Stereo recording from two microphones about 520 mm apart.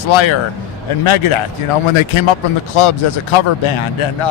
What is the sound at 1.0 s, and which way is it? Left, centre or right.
Speech, left.